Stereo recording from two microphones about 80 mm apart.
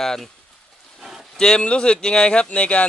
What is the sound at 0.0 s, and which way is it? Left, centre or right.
Speech, centre.